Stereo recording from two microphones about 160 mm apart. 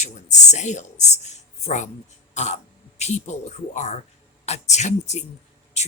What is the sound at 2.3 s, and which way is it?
Throat clearing, 45° left (ahead or behind).